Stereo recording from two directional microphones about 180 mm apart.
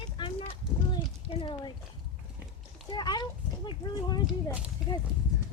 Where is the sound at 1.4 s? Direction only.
30° left (ahead or behind).